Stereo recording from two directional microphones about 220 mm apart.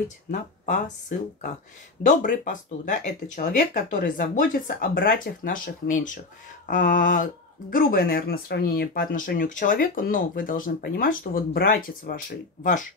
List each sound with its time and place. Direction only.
0.3 s speech: 35° left (ahead or behind)